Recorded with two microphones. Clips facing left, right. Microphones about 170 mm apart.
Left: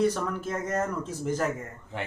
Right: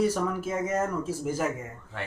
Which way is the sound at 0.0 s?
10° right (ahead or behind).